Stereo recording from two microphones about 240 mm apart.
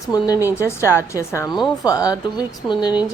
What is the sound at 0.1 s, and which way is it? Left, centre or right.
A woman's voice, centre.